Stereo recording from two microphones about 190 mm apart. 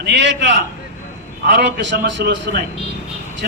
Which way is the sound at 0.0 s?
65° right (ahead or behind).